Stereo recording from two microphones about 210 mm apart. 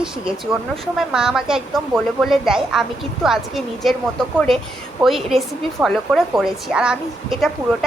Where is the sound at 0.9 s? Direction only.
Centre (ahead or behind).